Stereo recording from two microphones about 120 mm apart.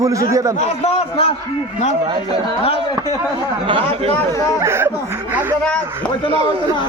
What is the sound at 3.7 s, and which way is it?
Speech, 45° right (ahead or behind).